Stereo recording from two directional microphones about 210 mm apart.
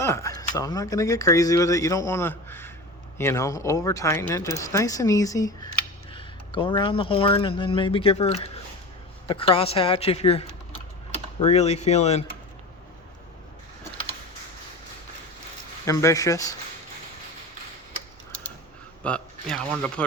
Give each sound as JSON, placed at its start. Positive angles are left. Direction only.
{"t": 0.0, "sound": "speech", "side_deg": 15}
{"t": 15.9, "sound": "speech", "side_deg": 15}
{"t": 19.0, "sound": "a man's voice", "side_deg": 5}